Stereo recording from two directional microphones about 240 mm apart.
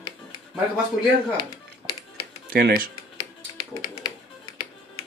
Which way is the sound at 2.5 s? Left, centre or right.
Right.